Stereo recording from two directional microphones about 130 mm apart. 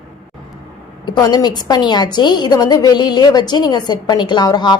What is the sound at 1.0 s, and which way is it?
A woman's voice, 35° left (ahead or behind).